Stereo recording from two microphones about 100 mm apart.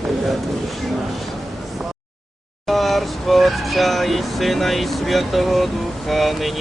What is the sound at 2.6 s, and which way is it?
Vehicle, centre (ahead or behind).